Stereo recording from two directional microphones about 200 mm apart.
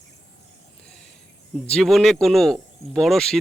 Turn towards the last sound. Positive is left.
turn(degrees=0)  # may be behind; listen again after turning